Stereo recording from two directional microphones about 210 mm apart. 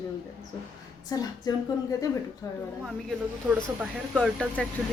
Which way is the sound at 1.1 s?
15° left (ahead or behind).